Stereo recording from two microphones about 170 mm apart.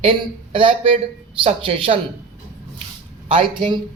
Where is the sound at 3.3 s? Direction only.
30° right (ahead or behind).